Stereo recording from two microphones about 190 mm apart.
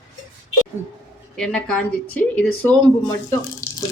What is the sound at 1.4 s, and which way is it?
A woman's voice, 5° left (ahead or behind).